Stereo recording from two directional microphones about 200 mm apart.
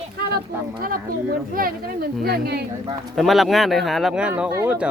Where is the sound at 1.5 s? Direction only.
45° right (ahead or behind).